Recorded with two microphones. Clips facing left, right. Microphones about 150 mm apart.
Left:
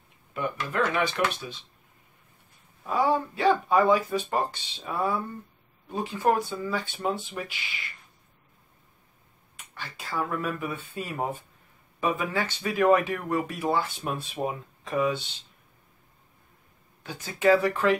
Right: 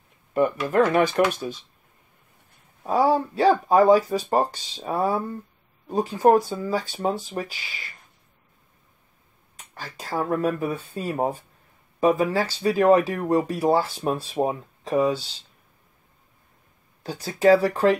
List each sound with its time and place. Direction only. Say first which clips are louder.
0.7 s speech: right 5 dB; 45° right (ahead or behind)
2.8 s speech: right 4 dB; 35° right (ahead or behind)
9.6 s speech: right 3 dB; 40° right (ahead or behind)
17.0 s speech: right 5 dB; 35° right (ahead or behind)